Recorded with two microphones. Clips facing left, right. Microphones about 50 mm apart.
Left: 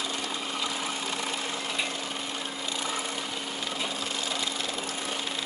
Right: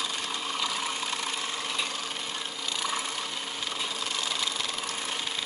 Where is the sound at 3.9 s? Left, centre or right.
Left.